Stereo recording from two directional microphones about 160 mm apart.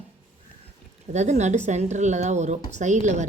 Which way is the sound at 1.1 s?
45° right (ahead or behind).